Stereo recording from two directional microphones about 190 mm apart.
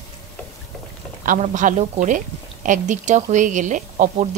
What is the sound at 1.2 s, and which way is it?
A woman's voice, 40° right (ahead or behind).